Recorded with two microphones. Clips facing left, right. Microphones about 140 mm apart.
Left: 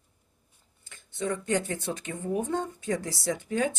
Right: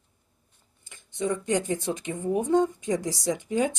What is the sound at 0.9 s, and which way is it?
Speech, 15° right (ahead or behind).